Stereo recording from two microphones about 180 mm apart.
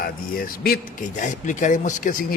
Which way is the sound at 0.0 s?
55° left (ahead or behind).